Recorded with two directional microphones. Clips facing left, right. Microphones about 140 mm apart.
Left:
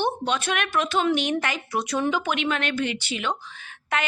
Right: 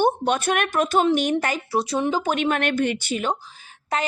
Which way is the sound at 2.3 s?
45° right (ahead or behind).